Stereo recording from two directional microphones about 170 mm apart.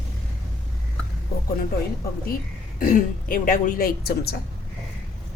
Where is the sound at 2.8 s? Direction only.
55° left (ahead or behind).